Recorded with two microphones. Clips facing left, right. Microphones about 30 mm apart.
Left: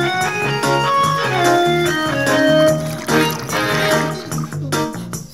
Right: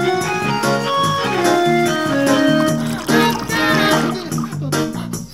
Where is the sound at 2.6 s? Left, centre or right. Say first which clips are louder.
Left 2 dB; centre.